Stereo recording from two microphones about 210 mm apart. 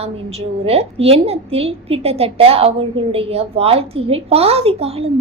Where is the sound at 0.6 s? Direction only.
30° right (ahead or behind).